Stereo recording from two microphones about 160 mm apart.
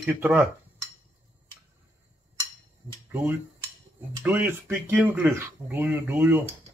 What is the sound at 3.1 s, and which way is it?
Speech, 15° right (ahead or behind).